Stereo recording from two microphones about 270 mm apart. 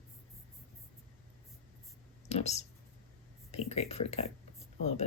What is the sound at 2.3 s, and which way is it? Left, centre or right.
Speech, left.